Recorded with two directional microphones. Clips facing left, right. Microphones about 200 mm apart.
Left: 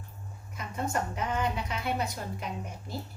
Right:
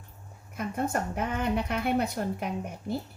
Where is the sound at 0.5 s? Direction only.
55° right (ahead or behind).